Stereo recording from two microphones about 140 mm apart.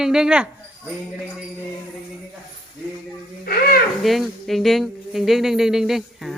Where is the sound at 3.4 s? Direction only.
90° left.